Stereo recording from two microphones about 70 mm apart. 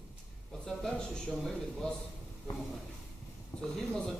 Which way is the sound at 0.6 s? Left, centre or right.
Centre.